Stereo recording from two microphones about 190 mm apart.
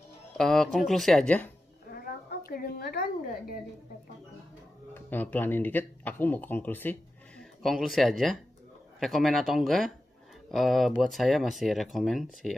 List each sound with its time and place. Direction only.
0.4 s speech: centre (ahead or behind)
1.9 s a sound: 50° left (ahead or behind)
4.9 s speech: 10° left (ahead or behind)